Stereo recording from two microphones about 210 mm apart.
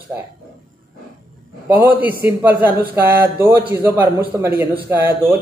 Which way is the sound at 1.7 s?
10° right (ahead or behind).